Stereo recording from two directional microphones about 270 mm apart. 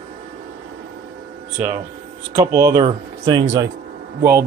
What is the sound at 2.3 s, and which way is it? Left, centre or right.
Speech, centre.